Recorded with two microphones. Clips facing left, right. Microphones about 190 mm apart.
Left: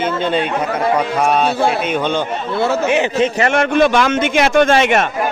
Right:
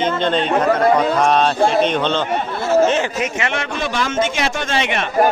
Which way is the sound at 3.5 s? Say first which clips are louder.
Left 10 dB; 55° left (ahead or behind).